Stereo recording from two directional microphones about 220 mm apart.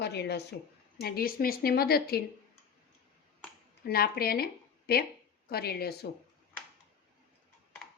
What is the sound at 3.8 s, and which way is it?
Speech, 45° left (ahead or behind).